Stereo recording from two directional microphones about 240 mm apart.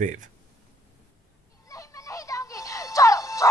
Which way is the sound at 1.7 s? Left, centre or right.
Centre.